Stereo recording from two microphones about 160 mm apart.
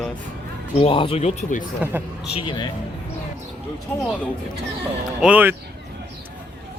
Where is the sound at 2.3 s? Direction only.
30° left (ahead or behind).